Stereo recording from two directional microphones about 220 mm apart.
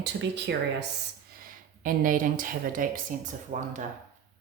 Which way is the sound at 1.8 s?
40° right (ahead or behind).